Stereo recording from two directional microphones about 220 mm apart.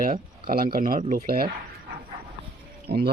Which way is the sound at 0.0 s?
40° right (ahead or behind).